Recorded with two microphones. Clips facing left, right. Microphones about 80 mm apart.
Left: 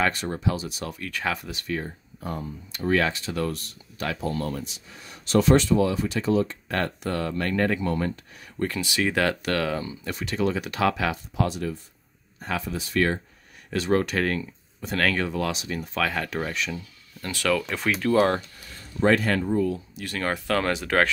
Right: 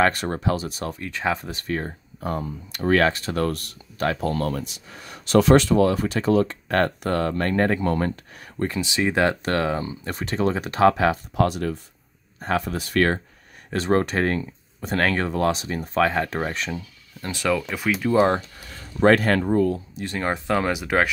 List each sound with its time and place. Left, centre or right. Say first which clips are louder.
0.0 s speech: right 4 dB; right
1.0 s speech: right 3 dB; right
8.6 s speech: right 2 dB; right
11.3 s speech: right 5 dB; right
12.4 s speech: right 6 dB; right
12.6 s speech: right 1 dB; right
13.7 s speech: right 2 dB; right
17.2 s speech: right 1 dB; right
18.1 s speech: right 2 dB; right
18.9 s speech: right 4 dB; right
20.0 s speech: right 1 dB; right